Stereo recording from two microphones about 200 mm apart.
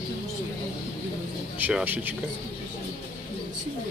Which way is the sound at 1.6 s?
10° right (ahead or behind).